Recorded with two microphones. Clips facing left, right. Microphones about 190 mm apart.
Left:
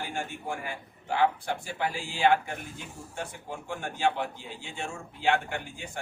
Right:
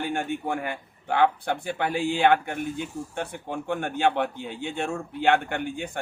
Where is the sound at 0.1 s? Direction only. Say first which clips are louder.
Right 7 dB; 60° right (ahead or behind).